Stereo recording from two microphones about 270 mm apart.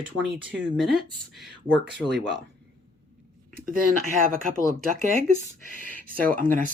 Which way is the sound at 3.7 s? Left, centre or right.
Right.